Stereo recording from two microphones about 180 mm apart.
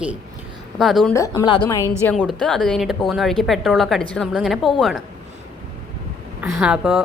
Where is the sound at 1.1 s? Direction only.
15° left (ahead or behind).